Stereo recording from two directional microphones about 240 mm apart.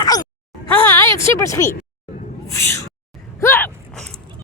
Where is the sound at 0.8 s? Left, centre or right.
Centre.